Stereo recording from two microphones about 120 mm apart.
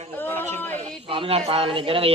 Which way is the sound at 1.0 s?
45° right (ahead or behind).